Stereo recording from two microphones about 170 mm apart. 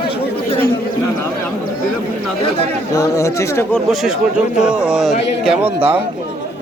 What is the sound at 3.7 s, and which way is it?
A man's voice, centre (ahead or behind).